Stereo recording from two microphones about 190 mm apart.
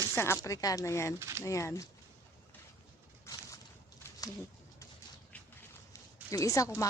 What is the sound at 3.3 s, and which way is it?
Boat, 15° left (ahead or behind).